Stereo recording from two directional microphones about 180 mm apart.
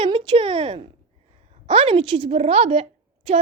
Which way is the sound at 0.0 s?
30° right (ahead or behind).